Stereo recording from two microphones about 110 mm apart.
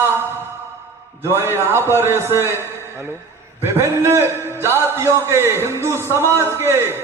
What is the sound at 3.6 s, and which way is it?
A man's voice, 25° right (ahead or behind).